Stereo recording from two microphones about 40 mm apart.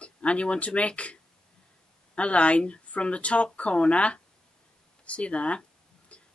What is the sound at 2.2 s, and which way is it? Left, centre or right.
Speech, left.